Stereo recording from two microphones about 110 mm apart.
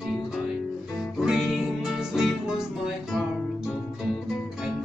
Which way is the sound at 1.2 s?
5° right (ahead or behind).